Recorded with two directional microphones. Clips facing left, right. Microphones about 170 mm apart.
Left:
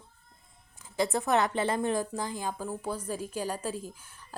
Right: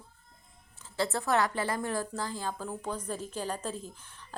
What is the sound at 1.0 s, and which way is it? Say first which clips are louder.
A woman's voice: left 2 dB; 15° left (ahead or behind).